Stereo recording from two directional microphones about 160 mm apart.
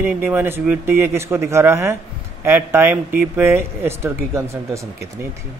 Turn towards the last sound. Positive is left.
turn(degrees=-20)  # may be behind; listen again after turning